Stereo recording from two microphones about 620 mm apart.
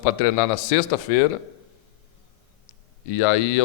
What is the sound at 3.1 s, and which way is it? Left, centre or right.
Speech, left.